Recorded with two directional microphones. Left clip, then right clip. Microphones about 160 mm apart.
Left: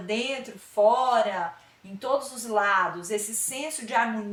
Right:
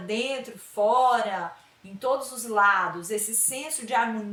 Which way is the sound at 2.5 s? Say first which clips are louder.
Right 2 dB; 15° right (ahead or behind).